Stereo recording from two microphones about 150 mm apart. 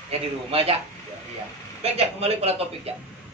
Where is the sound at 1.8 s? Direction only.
45° right (ahead or behind).